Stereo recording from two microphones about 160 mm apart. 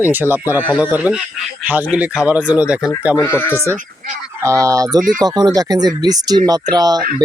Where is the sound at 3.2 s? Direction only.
15° left (ahead or behind).